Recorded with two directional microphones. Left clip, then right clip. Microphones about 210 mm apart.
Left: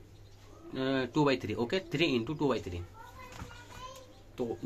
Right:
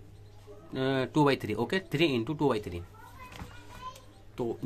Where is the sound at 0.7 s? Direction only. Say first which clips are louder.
Right 2 dB; 25° right (ahead or behind).